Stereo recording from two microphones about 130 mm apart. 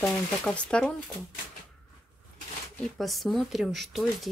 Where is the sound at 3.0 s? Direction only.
Centre (ahead or behind).